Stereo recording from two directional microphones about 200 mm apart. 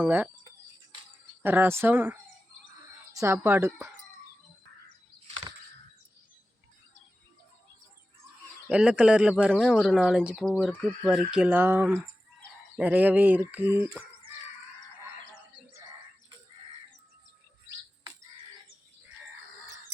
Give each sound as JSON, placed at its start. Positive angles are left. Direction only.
{"t": 0.0, "sound": "speech", "side_deg": -10}
{"t": 1.4, "sound": "speech", "side_deg": -10}
{"t": 3.2, "sound": "speech", "side_deg": -10}
{"t": 5.3, "sound": "bird flight", "side_deg": -25}
{"t": 8.7, "sound": "speech", "side_deg": -5}